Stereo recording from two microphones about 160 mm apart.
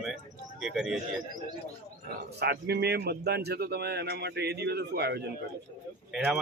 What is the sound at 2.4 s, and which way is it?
Speech, 85° right.